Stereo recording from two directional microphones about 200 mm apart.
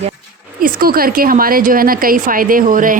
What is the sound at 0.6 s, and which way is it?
A woman's voice, 45° right (ahead or behind).